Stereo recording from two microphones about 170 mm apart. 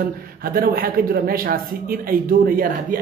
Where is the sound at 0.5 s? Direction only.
60° right (ahead or behind).